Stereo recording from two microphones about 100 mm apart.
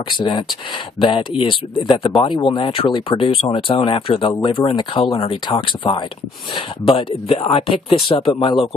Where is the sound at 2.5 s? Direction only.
70° left (ahead or behind).